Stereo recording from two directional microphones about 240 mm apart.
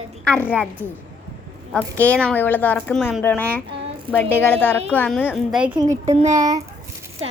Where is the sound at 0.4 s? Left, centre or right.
Centre.